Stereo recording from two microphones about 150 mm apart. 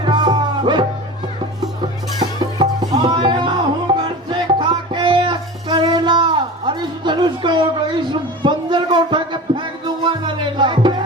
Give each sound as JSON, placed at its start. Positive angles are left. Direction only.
{"t": 0.0, "sound": "music", "side_deg": -30}
{"t": 2.6, "sound": "music", "side_deg": -35}
{"t": 8.1, "sound": "a sound", "side_deg": -30}
{"t": 10.1, "sound": "music", "side_deg": -30}